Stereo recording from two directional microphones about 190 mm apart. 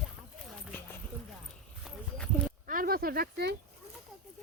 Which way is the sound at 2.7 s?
50° right (ahead or behind).